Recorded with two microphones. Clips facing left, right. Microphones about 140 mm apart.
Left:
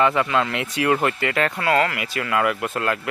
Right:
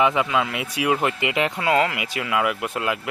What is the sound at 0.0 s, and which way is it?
Speech, 15° right (ahead or behind).